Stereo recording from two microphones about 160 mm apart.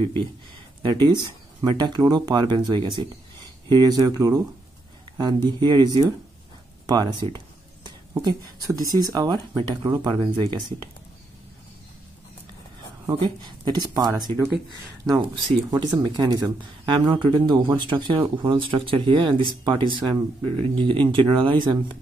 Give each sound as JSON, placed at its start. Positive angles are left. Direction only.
{"t": 0.8, "sound": "speech", "side_deg": -30}
{"t": 5.6, "sound": "speech", "side_deg": -25}
{"t": 6.9, "sound": "a sound", "side_deg": -25}
{"t": 8.7, "sound": "speech", "side_deg": -25}
{"t": 13.0, "sound": "speech", "side_deg": -25}